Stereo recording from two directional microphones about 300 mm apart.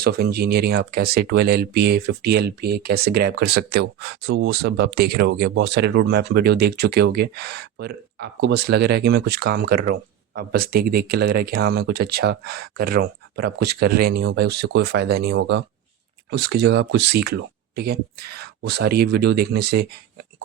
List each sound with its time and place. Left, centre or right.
0.0 s speech: right